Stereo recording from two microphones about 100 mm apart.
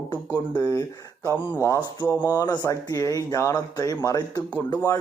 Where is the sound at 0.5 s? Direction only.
40° left (ahead or behind).